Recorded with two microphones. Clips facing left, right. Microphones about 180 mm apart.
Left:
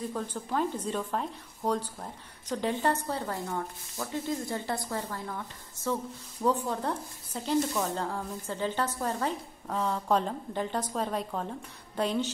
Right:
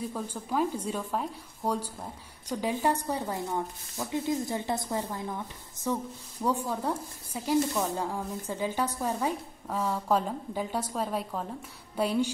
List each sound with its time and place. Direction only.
0.1 s speech: 10° right (ahead or behind)